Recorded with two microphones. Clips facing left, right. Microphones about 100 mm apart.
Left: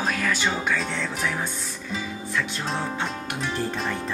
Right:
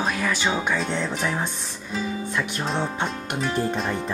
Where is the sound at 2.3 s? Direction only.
20° right (ahead or behind).